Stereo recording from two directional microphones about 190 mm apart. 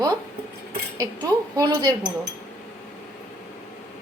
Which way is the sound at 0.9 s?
20° right (ahead or behind).